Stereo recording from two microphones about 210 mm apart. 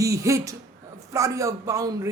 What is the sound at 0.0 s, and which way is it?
Speech, 15° right (ahead or behind).